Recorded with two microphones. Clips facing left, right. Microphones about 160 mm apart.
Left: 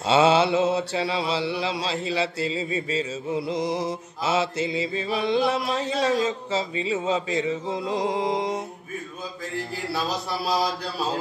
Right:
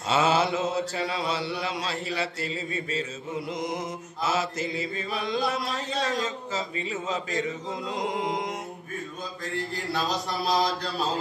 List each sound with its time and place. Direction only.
0.0 s mantra: 30° left (ahead or behind)
6.9 s music: 25° left (ahead or behind)
10.4 s mantra: 5° left (ahead or behind)